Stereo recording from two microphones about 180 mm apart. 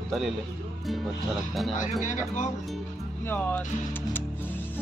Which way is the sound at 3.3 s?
10° left (ahead or behind).